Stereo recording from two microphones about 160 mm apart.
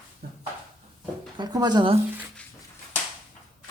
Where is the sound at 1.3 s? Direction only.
25° right (ahead or behind).